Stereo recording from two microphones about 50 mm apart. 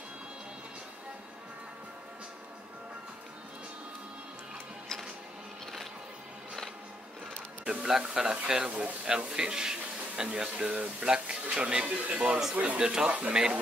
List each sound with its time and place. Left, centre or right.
7.8 s speech: centre
8.6 s speech: right
9.2 s speech: centre
12.8 s speech: centre